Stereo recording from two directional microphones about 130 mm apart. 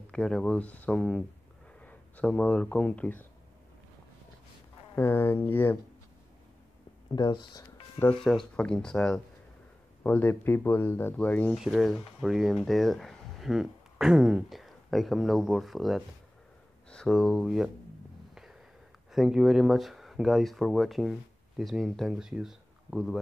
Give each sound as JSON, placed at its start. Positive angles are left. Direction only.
{"t": 0.1, "sound": "speech", "side_deg": 5}
{"t": 4.9, "sound": "speech", "side_deg": 15}
{"t": 7.2, "sound": "speech", "side_deg": 30}
{"t": 8.0, "sound": "speech", "side_deg": 5}
{"t": 11.5, "sound": "speech", "side_deg": 0}
{"t": 18.3, "sound": "a sound", "side_deg": -5}
{"t": 19.1, "sound": "speech", "side_deg": 0}